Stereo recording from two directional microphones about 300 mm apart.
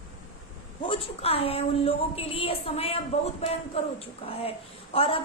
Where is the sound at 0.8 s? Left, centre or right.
Centre.